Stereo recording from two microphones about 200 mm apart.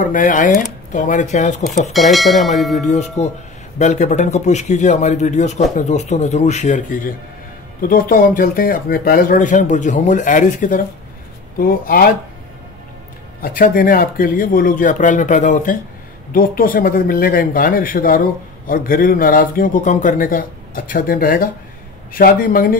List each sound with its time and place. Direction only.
0.0 s speech: 40° left (ahead or behind)
1.9 s speech: centre (ahead or behind)
2.9 s speech: 35° left (ahead or behind)
13.4 s speech: 45° left (ahead or behind)